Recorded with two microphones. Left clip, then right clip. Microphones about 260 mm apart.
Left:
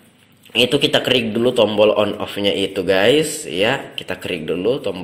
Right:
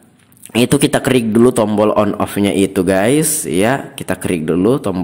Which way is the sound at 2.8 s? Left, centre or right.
Right.